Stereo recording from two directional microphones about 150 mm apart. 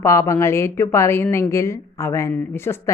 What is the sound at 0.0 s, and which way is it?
Speech, 20° left (ahead or behind).